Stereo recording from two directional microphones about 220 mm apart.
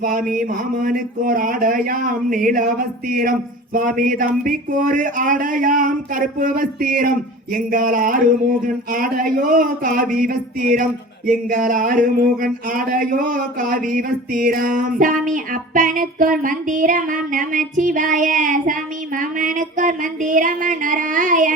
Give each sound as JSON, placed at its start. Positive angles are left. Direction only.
{"t": 0.0, "sound": "speech", "side_deg": -40}